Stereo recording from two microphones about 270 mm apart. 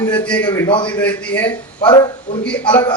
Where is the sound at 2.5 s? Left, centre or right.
Centre.